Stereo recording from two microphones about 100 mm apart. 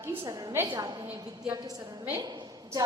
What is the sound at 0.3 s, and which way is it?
Speech, 40° right (ahead or behind).